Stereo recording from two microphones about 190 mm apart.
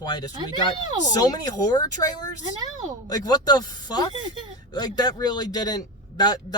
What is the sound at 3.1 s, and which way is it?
Speech, 20° left (ahead or behind).